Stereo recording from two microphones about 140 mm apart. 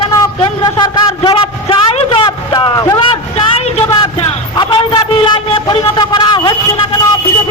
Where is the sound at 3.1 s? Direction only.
45° left (ahead or behind).